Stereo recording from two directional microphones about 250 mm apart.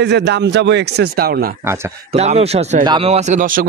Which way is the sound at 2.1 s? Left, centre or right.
Right.